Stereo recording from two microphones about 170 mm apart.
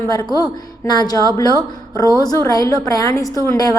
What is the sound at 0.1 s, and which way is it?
A woman's voice, 25° left (ahead or behind).